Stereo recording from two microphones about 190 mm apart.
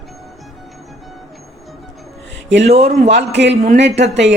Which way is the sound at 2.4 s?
70° right (ahead or behind).